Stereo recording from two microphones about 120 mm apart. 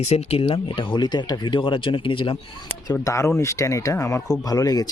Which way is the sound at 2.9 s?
25° left (ahead or behind).